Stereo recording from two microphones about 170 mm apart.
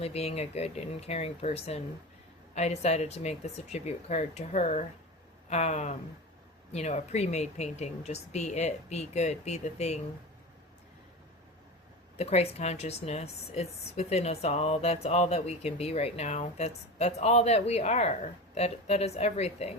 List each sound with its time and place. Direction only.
0.0 s a woman's voice: 35° left (ahead or behind)
12.1 s a woman's voice: 40° left (ahead or behind)